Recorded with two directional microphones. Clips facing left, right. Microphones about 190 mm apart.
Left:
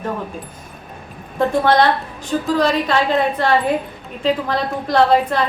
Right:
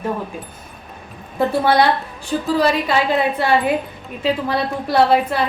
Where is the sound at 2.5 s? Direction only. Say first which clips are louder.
Even; 5° right (ahead or behind).